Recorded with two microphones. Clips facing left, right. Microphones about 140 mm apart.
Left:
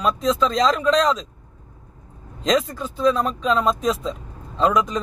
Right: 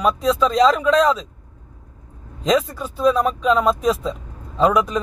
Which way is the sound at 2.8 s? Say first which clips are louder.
Right 2 dB; 10° right (ahead or behind).